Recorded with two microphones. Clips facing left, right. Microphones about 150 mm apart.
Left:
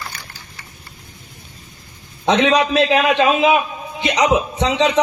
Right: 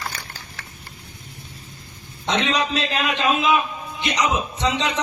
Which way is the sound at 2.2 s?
70° left (ahead or behind).